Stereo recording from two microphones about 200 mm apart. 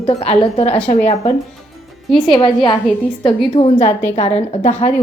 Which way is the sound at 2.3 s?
25° left (ahead or behind).